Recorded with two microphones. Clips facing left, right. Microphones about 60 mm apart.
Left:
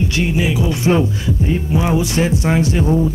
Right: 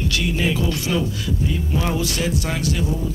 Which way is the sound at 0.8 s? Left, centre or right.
Left.